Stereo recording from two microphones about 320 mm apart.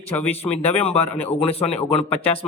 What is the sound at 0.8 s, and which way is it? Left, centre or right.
Speech, centre.